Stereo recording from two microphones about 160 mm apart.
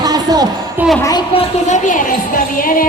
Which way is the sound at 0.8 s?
10° right (ahead or behind).